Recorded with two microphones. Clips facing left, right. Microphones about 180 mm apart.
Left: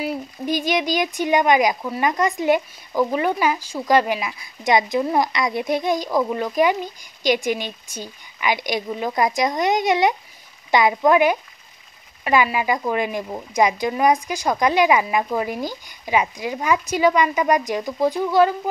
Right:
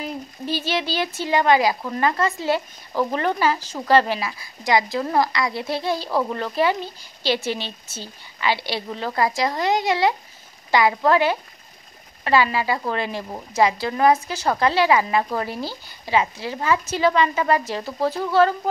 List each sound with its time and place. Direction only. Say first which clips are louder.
0.0 s speech: left 4 dB; 10° left (ahead or behind)